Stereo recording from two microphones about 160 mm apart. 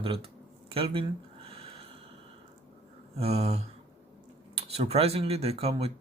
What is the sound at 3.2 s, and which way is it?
Speech, 40° right (ahead or behind).